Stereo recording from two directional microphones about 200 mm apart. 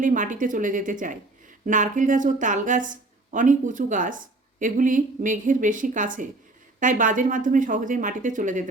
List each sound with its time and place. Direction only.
0.0 s speech: 40° right (ahead or behind)